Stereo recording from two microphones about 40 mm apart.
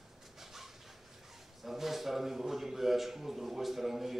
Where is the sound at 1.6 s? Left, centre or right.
Centre.